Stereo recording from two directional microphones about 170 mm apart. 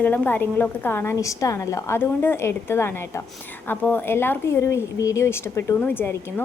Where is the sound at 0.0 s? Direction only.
10° left (ahead or behind).